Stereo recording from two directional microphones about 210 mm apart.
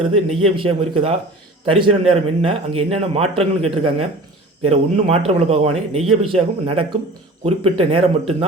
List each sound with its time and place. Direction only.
0.4 s a man's voice: 25° right (ahead or behind)